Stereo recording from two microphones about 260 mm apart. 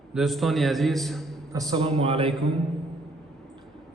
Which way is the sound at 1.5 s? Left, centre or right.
Centre.